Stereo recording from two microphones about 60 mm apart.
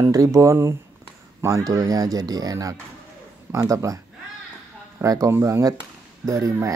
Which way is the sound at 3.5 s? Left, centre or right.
Right.